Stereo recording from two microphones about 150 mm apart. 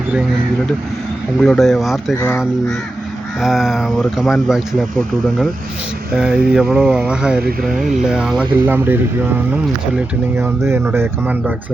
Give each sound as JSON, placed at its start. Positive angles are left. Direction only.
{"t": 1.4, "sound": "speech", "side_deg": 0}
{"t": 2.1, "sound": "speech", "side_deg": 15}
{"t": 3.4, "sound": "speech", "side_deg": -5}
{"t": 10.3, "sound": "speech", "side_deg": -15}